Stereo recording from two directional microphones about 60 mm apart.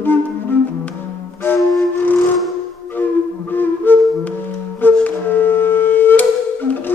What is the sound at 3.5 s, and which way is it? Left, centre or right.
Flute, left.